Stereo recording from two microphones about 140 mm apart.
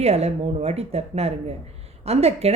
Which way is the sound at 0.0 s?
50° right (ahead or behind).